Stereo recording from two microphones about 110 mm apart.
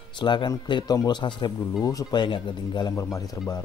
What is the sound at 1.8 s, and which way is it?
Speech, 30° left (ahead or behind).